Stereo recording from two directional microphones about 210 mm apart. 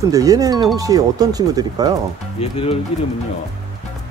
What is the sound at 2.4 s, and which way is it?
Speech, 25° left (ahead or behind).